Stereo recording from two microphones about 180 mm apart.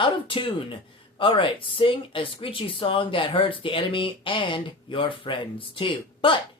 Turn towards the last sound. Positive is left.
turn(degrees=30)  # may be behind; listen again after turning